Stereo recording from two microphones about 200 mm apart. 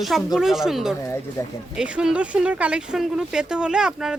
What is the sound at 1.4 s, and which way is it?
Speech, 15° left (ahead or behind).